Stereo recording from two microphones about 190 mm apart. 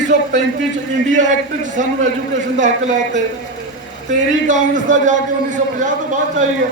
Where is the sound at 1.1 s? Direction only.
40° right (ahead or behind).